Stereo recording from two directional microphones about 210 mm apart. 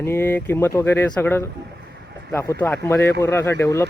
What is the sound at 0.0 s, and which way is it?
Speech, 10° left (ahead or behind).